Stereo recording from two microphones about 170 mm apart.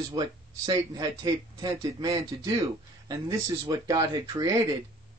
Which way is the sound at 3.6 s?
20° right (ahead or behind).